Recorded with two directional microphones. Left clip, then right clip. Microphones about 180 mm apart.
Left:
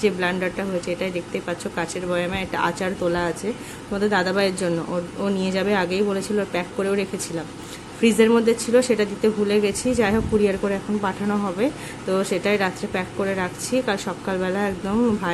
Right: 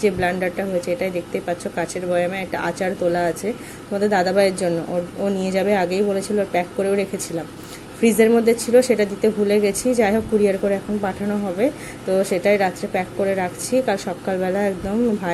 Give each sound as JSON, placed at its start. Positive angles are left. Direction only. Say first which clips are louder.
{"t": 0.0, "sound": "speech", "louder": "right 2 dB", "side_deg": 0}